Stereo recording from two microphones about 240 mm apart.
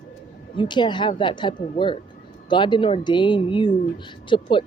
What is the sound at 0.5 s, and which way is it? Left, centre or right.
Speech, centre.